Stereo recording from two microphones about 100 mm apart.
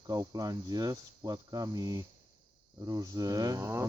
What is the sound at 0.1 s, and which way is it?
Speech, 40° right (ahead or behind).